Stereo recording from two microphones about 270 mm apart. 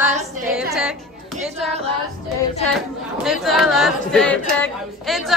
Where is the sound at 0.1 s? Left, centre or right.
Right.